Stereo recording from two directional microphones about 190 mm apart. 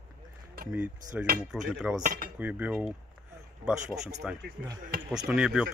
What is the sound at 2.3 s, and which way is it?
Speech, 10° right (ahead or behind).